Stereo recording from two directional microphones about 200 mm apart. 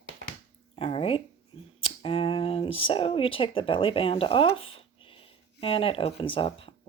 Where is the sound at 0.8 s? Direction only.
30° left (ahead or behind).